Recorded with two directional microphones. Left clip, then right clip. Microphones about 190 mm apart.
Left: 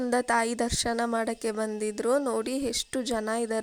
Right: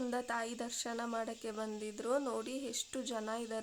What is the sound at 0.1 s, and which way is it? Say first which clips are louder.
A woman's voice: left 13 dB; 40° left (ahead or behind).